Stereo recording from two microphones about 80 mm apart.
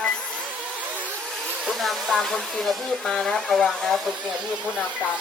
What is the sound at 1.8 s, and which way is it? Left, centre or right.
Speech, centre.